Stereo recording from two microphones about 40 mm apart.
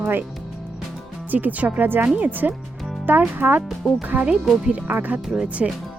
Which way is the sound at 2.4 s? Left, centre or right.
Right.